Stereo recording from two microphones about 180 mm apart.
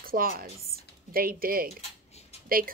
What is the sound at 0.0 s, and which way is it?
A woman's voice, 55° right (ahead or behind).